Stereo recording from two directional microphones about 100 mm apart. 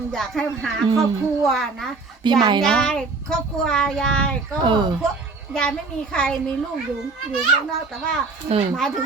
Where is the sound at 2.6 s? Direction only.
5° left (ahead or behind).